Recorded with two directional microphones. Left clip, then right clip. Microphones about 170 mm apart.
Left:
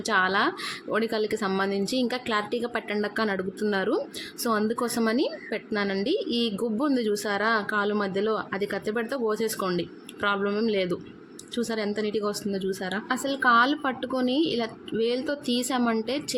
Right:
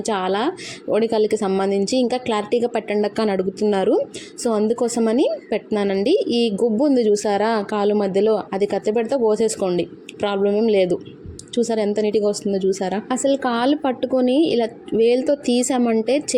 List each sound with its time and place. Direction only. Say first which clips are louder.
0.0 s speech: right 2 dB; 10° right (ahead or behind)